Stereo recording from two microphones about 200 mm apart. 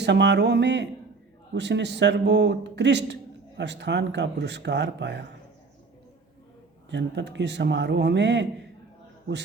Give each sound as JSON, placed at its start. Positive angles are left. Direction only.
{"t": 0.0, "sound": "speech", "side_deg": -60}
{"t": 6.9, "sound": "speech", "side_deg": -60}